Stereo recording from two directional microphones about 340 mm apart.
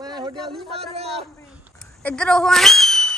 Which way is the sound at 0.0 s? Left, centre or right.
Centre.